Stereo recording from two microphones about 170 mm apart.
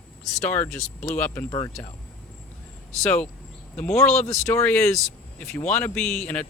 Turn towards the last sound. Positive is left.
turn(degrees=10)  # may be behind; listen again after turning